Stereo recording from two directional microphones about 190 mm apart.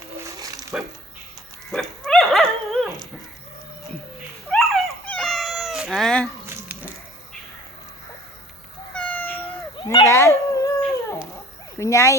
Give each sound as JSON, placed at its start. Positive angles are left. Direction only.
{"t": 0.3, "sound": "a sound", "side_deg": -15}
{"t": 0.7, "sound": "speech", "side_deg": -10}
{"t": 1.7, "sound": "dog", "side_deg": 0}
{"t": 4.4, "sound": "cat", "side_deg": 0}
{"t": 8.9, "sound": "cat", "side_deg": 5}
{"t": 9.7, "sound": "cat", "side_deg": 20}
{"t": 11.8, "sound": "a sound", "side_deg": 15}